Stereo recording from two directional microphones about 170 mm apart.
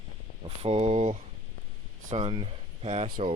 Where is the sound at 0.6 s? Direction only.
35° right (ahead or behind).